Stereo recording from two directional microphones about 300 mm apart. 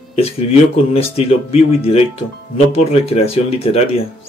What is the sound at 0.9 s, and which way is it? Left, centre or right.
Speech, centre.